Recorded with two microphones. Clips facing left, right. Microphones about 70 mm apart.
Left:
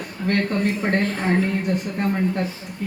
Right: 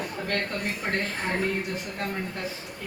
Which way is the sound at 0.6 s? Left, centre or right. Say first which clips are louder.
Left 8 dB; left.